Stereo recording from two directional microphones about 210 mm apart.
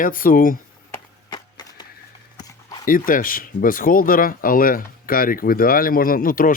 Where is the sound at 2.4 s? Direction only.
15° left (ahead or behind).